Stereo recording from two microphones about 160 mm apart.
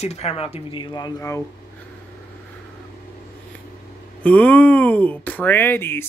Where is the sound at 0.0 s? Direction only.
40° left (ahead or behind); by 1.4 s 20° left (ahead or behind).